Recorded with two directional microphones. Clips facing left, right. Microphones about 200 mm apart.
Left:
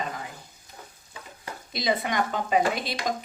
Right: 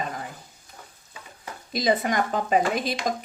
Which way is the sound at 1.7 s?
45° right (ahead or behind).